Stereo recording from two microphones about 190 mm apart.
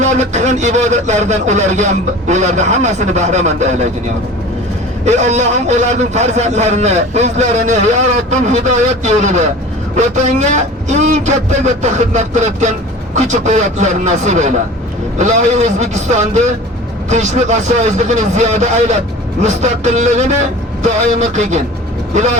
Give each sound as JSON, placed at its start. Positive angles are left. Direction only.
{"t": 0.0, "sound": "a man's voice", "side_deg": -40}
{"t": 5.0, "sound": "a man's voice", "side_deg": -35}